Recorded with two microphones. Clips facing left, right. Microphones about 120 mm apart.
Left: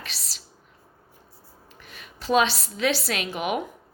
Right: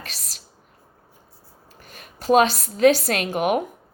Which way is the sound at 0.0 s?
45° right (ahead or behind).